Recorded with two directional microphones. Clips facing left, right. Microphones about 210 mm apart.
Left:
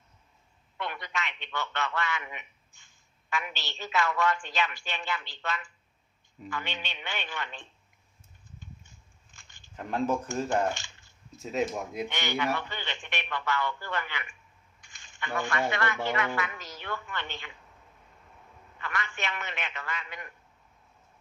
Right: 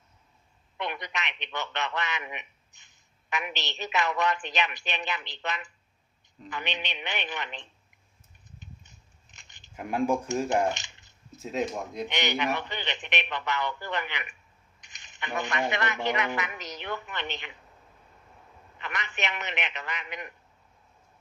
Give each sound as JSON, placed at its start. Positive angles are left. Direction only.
{"t": 0.8, "sound": "a man's voice", "side_deg": -20}
{"t": 8.5, "sound": "scissors", "side_deg": -20}
{"t": 11.3, "sound": "speech", "side_deg": 0}
{"t": 12.0, "sound": "a man's voice", "side_deg": -20}
{"t": 18.8, "sound": "a man's voice", "side_deg": -20}